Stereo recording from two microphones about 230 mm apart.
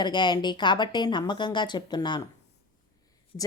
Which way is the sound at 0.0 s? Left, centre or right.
Centre.